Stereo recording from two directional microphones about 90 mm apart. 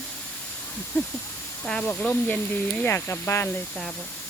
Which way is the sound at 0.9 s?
20° left (ahead or behind).